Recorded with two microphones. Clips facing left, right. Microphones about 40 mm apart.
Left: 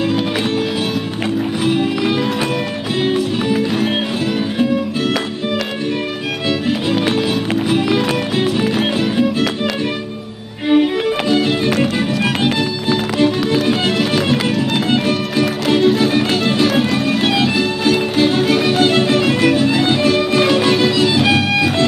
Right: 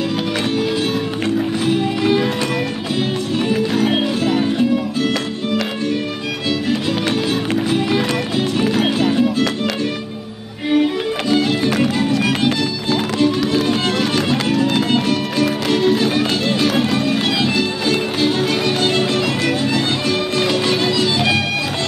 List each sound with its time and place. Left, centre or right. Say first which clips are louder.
1.6 s music: left 4 dB; centre
3.5 s music: right 2 dB; centre
6.7 s music: left 2 dB; centre
10.7 s music: left 3 dB; centre